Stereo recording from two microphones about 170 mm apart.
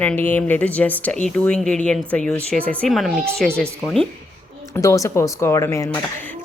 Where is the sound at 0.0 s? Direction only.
10° left (ahead or behind).